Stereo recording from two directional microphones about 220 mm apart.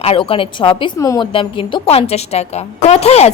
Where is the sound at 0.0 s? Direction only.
25° left (ahead or behind).